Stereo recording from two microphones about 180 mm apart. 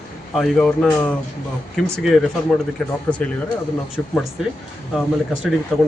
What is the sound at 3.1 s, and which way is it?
Speech, 10° left (ahead or behind).